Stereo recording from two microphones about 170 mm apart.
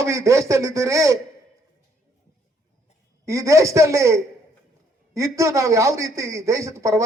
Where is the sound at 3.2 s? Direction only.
20° right (ahead or behind).